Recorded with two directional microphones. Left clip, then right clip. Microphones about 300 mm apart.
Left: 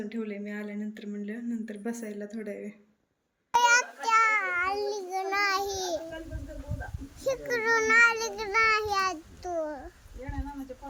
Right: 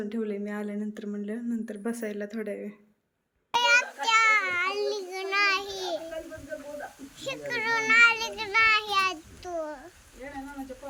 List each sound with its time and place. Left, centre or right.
0.1 s speech: centre
3.5 s a sound: centre
7.5 s child singing: centre